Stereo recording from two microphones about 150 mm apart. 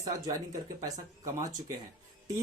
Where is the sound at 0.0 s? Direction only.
20° right (ahead or behind).